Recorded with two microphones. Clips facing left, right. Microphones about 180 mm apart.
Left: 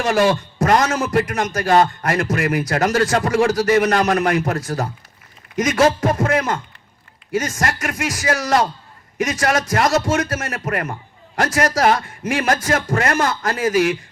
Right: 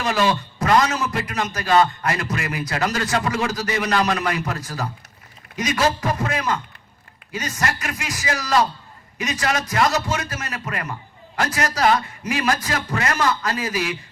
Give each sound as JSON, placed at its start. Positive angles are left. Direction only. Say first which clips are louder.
{"t": 0.0, "sound": "speech", "louder": "left 4 dB", "side_deg": 50}